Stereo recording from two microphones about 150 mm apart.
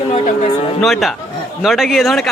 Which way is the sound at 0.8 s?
Centre (ahead or behind).